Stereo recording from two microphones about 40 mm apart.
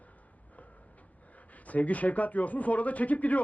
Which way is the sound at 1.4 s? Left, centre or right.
Left.